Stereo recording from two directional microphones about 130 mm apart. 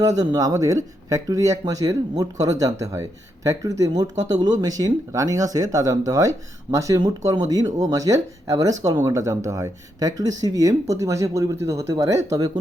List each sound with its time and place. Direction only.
0.2 s speech: 25° right (ahead or behind)